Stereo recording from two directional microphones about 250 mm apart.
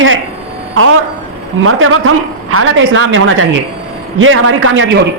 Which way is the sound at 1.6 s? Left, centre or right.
Right.